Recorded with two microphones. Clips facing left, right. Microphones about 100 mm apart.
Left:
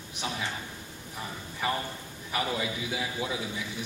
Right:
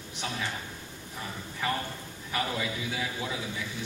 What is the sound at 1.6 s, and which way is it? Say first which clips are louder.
A man's voice: left 1 dB; 20° left (ahead or behind).